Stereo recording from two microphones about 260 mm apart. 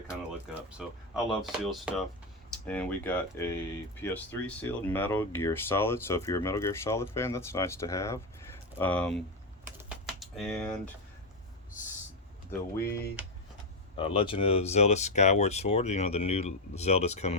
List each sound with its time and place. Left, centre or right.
0.8 s speech: centre
9.7 s typing: centre
12.5 s speech: centre
13.9 s speech: centre